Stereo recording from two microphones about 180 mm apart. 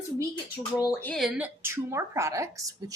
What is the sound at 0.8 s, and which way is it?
Speech, 15° left (ahead or behind).